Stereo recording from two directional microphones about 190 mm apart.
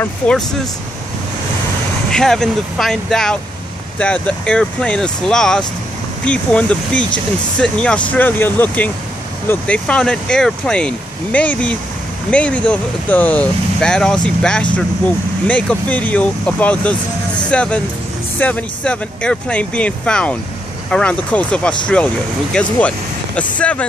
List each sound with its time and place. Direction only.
0.0 s speech: 5° left (ahead or behind)
2.0 s speech: 5° left (ahead or behind)